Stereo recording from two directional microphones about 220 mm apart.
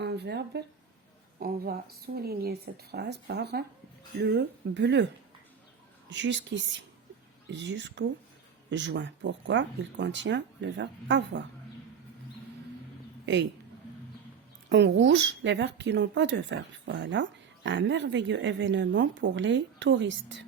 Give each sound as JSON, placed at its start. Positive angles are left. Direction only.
{"t": 0.0, "sound": "speech", "side_deg": -50}
{"t": 6.1, "sound": "speech", "side_deg": -55}
{"t": 13.2, "sound": "speech", "side_deg": -55}
{"t": 14.7, "sound": "speech", "side_deg": -50}